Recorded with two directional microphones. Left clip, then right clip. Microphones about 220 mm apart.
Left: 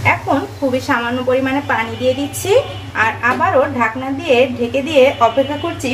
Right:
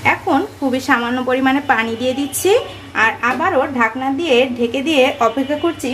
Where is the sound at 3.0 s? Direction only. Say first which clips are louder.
Left 1 dB; 40° right (ahead or behind).